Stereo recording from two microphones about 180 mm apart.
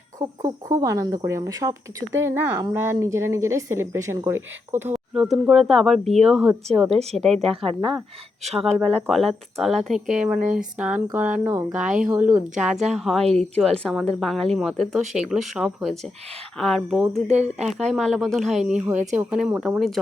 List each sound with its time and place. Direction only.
0.2 s speech: 20° right (ahead or behind); by 6.1 s centre (ahead or behind)
6.9 s speech: 35° right (ahead or behind)
8.4 s speech: centre (ahead or behind)
17.2 s speech: 40° right (ahead or behind)
17.7 s speech: centre (ahead or behind)